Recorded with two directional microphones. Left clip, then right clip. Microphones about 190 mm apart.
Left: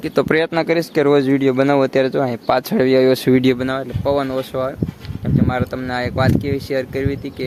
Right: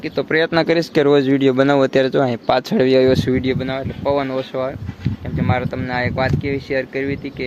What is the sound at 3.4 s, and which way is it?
Speech, 65° left (ahead or behind).